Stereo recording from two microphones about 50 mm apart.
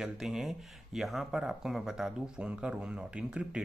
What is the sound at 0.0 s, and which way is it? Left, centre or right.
Speech, centre.